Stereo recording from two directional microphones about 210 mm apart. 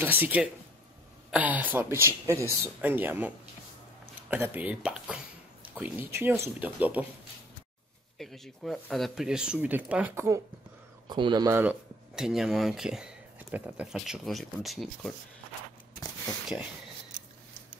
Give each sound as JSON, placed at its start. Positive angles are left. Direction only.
{"t": 0.0, "sound": "speech", "side_deg": -10}
{"t": 8.2, "sound": "speech", "side_deg": 0}
{"t": 12.2, "sound": "speech", "side_deg": 0}